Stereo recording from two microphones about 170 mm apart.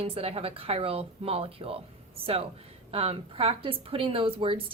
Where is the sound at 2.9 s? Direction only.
35° right (ahead or behind).